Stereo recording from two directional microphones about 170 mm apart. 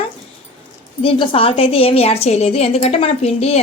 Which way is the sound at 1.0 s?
30° left (ahead or behind).